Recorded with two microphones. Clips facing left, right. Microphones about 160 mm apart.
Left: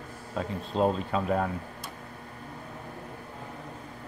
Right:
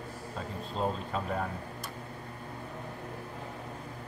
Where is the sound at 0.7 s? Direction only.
75° left (ahead or behind).